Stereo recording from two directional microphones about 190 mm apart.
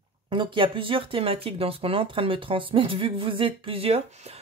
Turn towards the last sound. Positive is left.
turn(degrees=-30)  # may be behind; listen again after turning